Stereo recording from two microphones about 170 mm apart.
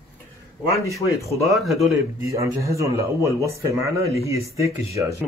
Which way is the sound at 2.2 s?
20° right (ahead or behind).